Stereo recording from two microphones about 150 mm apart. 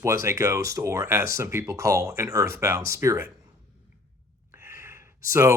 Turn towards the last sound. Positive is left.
turn(degrees=-20)  # may be behind; listen again after turning